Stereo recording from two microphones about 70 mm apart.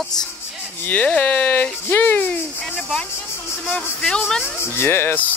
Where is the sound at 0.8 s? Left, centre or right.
Left.